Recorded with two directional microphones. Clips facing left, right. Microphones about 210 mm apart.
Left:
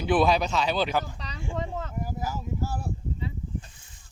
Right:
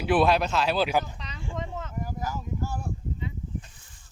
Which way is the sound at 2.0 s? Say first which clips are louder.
Left 1 dB; 10° left (ahead or behind).